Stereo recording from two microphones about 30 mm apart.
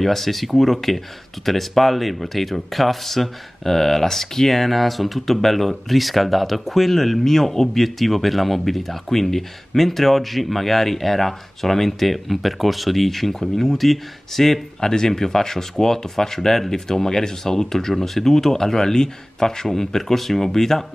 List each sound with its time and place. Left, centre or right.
0.0 s speech: centre